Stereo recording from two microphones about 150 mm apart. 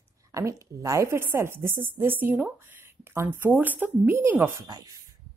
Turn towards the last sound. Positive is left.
turn(degrees=-25)  # may be behind; listen again after turning